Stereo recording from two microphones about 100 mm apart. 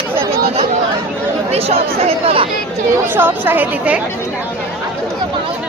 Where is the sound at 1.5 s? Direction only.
85° right.